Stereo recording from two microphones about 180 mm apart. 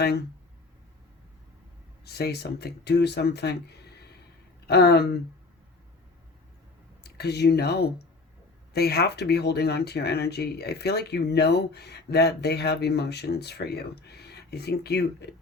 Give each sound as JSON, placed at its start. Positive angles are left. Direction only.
{"t": 2.0, "sound": "speech", "side_deg": 65}
{"t": 7.0, "sound": "speech", "side_deg": 65}